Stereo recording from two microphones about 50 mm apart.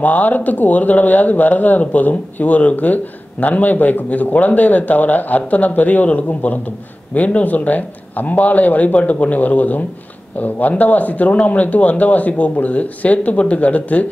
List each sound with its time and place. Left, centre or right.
0.0 s speech: left